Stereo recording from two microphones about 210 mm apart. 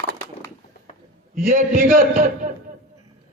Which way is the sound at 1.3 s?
40° right (ahead or behind).